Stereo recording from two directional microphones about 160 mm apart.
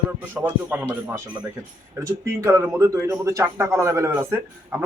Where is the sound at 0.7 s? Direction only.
10° right (ahead or behind).